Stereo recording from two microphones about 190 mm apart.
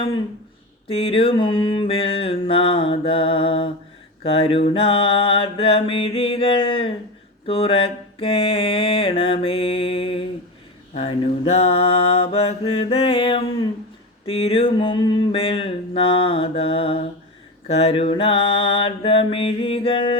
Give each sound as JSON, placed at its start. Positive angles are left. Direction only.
{"t": 0.9, "sound": "mantra", "side_deg": 30}